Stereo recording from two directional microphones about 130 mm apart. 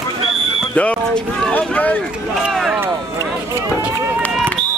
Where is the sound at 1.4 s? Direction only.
10° left (ahead or behind).